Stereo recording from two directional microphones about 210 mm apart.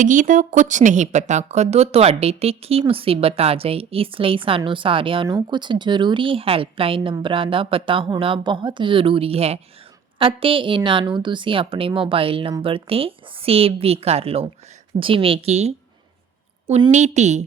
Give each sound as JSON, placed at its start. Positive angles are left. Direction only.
{"t": 0.0, "sound": "a woman's voice", "side_deg": -40}